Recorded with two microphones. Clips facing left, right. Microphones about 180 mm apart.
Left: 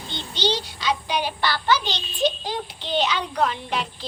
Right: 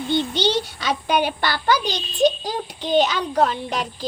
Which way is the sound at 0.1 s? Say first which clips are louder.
Right 5 dB; 50° right (ahead or behind).